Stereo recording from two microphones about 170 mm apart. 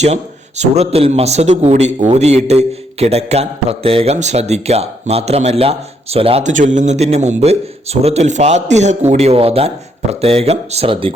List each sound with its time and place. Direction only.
0.0 s a man's voice: 40° right (ahead or behind)
6.4 s a man's voice: 45° right (ahead or behind)